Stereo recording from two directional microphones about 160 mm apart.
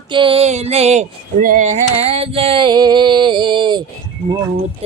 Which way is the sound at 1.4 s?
55° right (ahead or behind).